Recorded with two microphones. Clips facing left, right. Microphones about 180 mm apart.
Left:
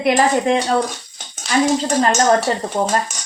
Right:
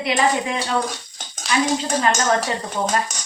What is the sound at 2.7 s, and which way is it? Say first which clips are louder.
Speech: left 3 dB; 45° left (ahead or behind).